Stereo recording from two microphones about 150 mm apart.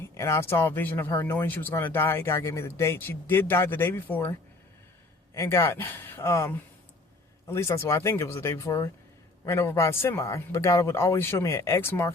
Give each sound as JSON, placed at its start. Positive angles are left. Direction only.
{"t": 0.1, "sound": "speech", "side_deg": 20}